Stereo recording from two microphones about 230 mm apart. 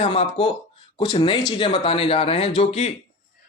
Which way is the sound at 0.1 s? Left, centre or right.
Left.